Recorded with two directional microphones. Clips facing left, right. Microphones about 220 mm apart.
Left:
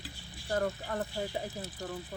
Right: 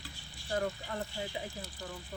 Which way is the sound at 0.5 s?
50° left (ahead or behind).